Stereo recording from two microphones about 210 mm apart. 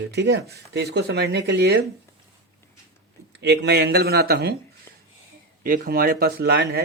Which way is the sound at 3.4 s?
50° right (ahead or behind).